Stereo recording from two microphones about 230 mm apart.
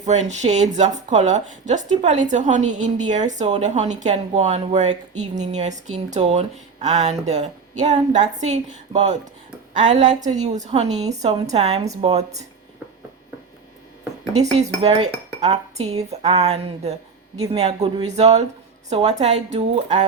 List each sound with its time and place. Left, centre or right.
0.0 s speech: right
14.8 s speech: right
15.4 s dishes: right
16.0 s speech: right